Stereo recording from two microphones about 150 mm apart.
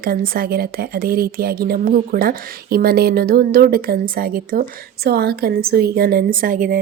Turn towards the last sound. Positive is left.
turn(degrees=-65)  # may be behind; listen again after turning